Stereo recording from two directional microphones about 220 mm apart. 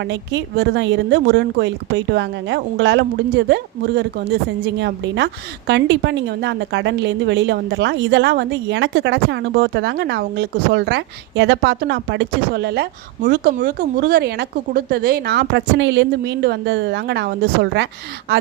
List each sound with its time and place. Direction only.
0.0 s speech: 55° right (ahead or behind)